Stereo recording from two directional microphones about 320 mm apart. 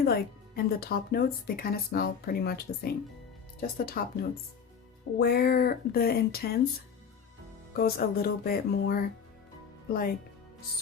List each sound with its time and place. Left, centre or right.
0.0 s speech: left
3.9 s speech: left
7.7 s speech: left